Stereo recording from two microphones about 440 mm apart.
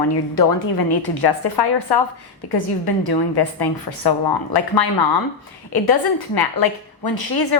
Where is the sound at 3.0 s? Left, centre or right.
Left.